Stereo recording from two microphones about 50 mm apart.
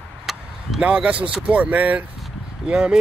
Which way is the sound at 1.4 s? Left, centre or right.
Right.